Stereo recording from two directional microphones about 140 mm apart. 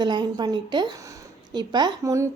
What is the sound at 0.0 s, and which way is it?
A woman's voice, 30° right (ahead or behind).